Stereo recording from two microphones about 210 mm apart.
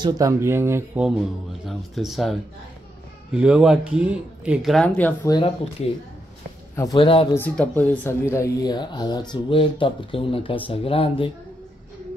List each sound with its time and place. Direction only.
0.0 s speech: 15° right (ahead or behind); by 5.3 s 10° left (ahead or behind)
5.3 s speech: 25° left (ahead or behind)
6.7 s a sound: 15° left (ahead or behind)
7.0 s speech: 25° left (ahead or behind)
7.3 s speech: 5° left (ahead or behind); by 11.3 s 25° left (ahead or behind)